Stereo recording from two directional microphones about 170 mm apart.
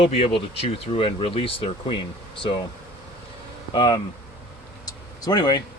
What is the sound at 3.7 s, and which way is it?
Speech, 25° left (ahead or behind).